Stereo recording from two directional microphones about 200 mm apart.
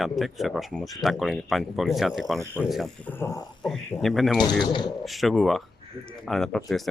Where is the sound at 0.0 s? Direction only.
Centre (ahead or behind); by 3.5 s 15° left (ahead or behind).